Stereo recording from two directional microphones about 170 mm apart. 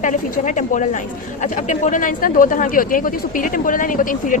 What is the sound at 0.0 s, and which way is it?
Speech, 45° left (ahead or behind).